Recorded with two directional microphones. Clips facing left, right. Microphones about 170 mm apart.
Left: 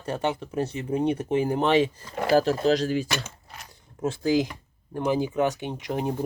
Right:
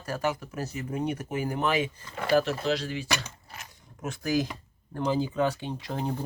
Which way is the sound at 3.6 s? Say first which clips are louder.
Left 9 dB; 30° left (ahead or behind).